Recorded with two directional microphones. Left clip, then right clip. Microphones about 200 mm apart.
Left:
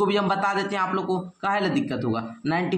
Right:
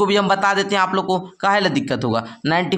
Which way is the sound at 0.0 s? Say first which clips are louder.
Right 6 dB; 35° right (ahead or behind).